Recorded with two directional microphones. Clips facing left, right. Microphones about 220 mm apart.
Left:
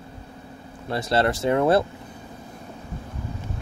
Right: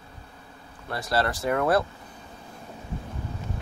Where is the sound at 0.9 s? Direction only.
25° left (ahead or behind).